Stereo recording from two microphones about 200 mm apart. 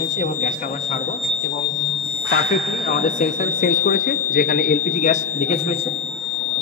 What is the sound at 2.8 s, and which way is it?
Speech, 35° left (ahead or behind).